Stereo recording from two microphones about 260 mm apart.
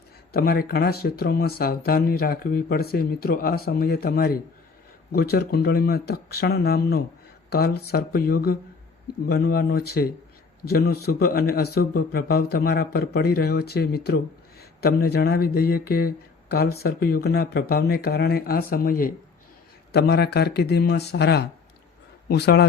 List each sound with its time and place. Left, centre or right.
0.3 s speech: left